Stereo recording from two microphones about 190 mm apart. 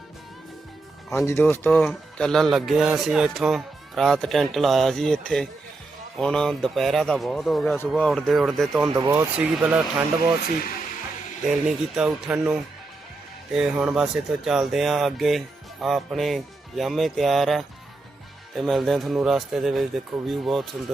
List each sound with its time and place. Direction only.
1.1 s speech: 15° left (ahead or behind)
9.0 s speech: 20° right (ahead or behind)
9.4 s speech: 10° right (ahead or behind)
11.4 s speech: 5° right (ahead or behind)